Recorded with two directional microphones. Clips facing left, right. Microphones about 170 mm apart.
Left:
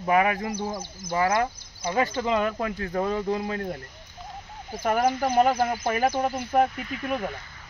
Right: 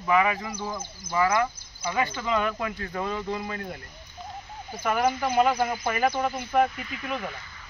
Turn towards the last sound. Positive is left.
turn(degrees=45)  # may be behind; listen again after turning